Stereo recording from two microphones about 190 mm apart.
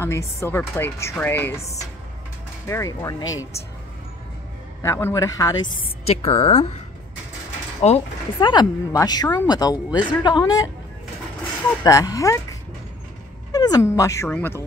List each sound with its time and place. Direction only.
0.0 s speech: 15° left (ahead or behind)
4.8 s speech: 15° left (ahead or behind)
6.0 s a woman's voice: 30° left (ahead or behind)
7.8 s a woman's voice: 35° left (ahead or behind)
8.4 s speech: 25° left (ahead or behind)
11.8 s speech: 20° left (ahead or behind)
13.5 s dog: 20° left (ahead or behind)